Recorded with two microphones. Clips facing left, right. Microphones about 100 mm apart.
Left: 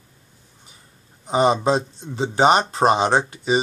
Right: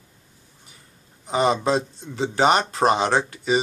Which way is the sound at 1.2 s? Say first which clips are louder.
Left 3 dB; 25° left (ahead or behind).